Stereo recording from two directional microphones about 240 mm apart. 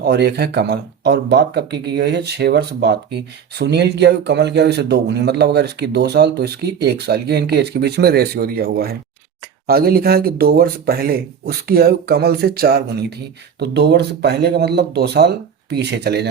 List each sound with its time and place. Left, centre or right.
0.0 s speech: right